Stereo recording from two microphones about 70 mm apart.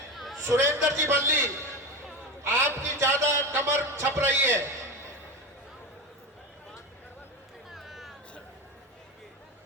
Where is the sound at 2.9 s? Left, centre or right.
Right.